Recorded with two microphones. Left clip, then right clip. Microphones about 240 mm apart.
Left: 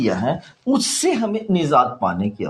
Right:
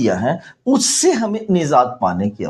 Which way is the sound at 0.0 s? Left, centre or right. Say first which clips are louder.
Right 3 dB; right.